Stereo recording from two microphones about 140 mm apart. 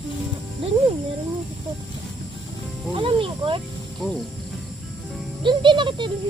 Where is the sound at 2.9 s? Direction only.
40° right (ahead or behind).